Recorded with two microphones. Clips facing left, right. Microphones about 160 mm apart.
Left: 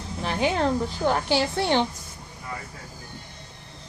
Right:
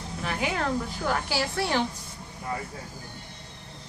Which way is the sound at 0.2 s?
30° left (ahead or behind).